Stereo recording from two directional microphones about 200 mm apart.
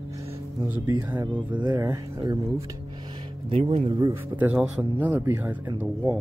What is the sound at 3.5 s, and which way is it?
Speech, 30° right (ahead or behind).